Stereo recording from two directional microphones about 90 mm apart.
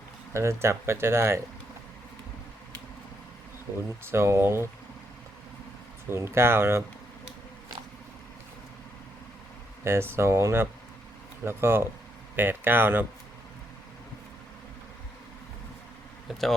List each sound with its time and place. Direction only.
0.3 s speech: 30° right (ahead or behind)
4.0 s speech: 30° right (ahead or behind)
6.1 s speech: 30° right (ahead or behind)
9.8 s speech: 25° right (ahead or behind)